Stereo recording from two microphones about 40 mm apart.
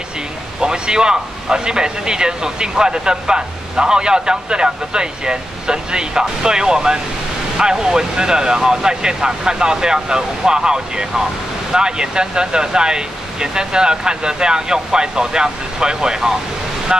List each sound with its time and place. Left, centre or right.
0.6 s speech: centre